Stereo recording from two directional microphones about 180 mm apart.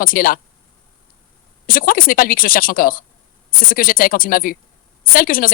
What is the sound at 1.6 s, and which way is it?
A woman's voice, 50° left (ahead or behind).